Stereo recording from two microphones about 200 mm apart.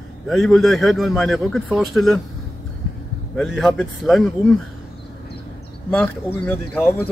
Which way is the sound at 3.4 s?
Centre (ahead or behind).